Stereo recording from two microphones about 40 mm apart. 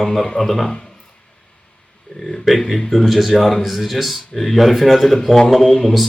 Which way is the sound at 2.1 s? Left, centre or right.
Centre.